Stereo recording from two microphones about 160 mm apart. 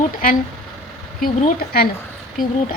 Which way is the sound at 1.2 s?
60° left (ahead or behind).